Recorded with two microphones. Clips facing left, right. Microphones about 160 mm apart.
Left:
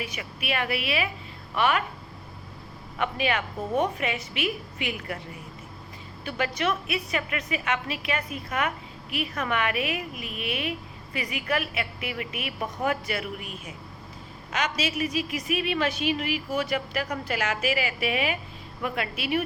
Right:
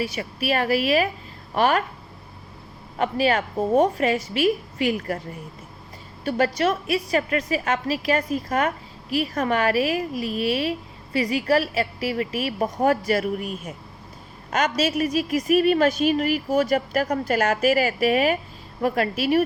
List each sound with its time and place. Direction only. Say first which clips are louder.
0.0 s a woman's voice: right 8 dB; 35° right (ahead or behind)
3.0 s a woman's voice: right 6 dB; 35° right (ahead or behind)
6.2 s a woman's voice: right 6 dB; 40° right (ahead or behind)